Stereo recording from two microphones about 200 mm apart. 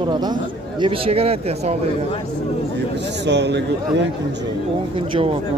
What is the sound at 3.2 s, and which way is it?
Speech, 60° right (ahead or behind).